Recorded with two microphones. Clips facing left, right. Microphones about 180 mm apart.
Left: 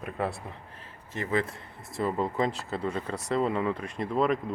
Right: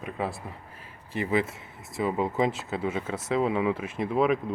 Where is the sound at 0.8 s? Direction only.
10° right (ahead or behind).